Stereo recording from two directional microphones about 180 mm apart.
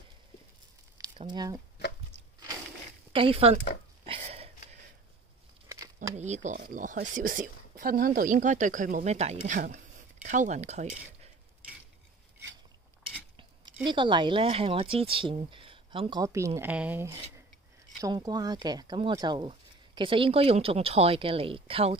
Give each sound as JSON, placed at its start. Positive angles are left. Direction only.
{"t": 1.2, "sound": "speech", "side_deg": -25}
{"t": 3.1, "sound": "speech", "side_deg": -30}
{"t": 4.0, "sound": "a sound", "side_deg": -35}
{"t": 6.1, "sound": "speech", "side_deg": -40}
{"t": 13.8, "sound": "speech", "side_deg": -25}